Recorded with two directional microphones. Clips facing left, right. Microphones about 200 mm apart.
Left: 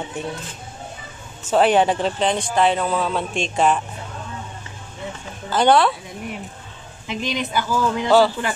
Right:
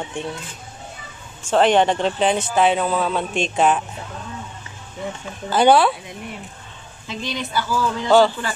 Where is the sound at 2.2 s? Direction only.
5° right (ahead or behind).